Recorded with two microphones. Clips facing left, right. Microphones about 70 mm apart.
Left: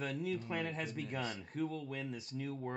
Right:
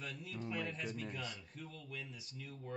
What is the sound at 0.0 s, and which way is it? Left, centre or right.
Speech, left.